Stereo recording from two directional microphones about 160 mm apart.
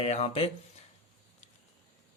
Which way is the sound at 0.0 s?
40° left (ahead or behind).